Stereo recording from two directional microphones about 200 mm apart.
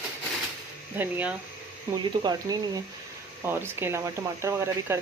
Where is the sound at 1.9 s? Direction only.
20° right (ahead or behind).